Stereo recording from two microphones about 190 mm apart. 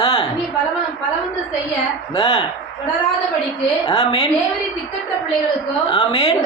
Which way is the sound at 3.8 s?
30° left (ahead or behind).